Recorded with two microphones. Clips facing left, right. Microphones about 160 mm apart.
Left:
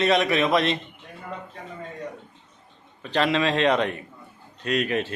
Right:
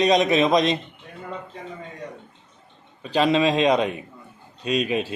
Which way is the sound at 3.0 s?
15° right (ahead or behind).